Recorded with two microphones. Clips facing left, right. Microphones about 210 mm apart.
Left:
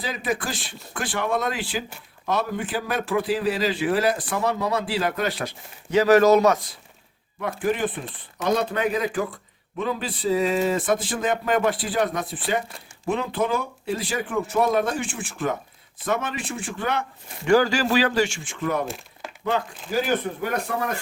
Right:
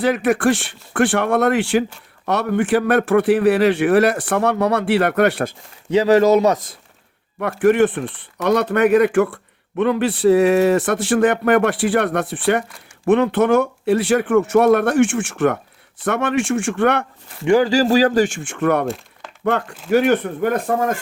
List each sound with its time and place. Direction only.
0.0 s speech: 70° right (ahead or behind)
5.9 s a man's voice: 30° right (ahead or behind)
7.6 s speech: 75° right (ahead or behind)
17.4 s a man's voice: 25° right (ahead or behind)
17.7 s a man's voice: 40° right (ahead or behind); by 18.9 s 65° right (ahead or behind)
18.9 s a sound: centre (ahead or behind)
19.5 s a man's voice: 60° right (ahead or behind)